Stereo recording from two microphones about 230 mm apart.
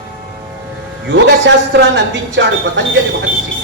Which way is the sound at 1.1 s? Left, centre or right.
Right.